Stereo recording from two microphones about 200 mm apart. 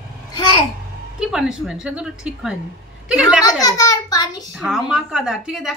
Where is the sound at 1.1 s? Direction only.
5° right (ahead or behind).